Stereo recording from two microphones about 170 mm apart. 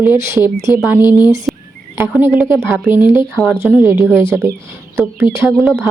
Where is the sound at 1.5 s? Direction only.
5° right (ahead or behind).